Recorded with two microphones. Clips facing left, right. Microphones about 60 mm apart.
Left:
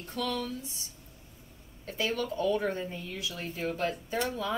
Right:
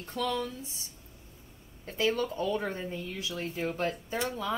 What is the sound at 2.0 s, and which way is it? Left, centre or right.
Speech, right.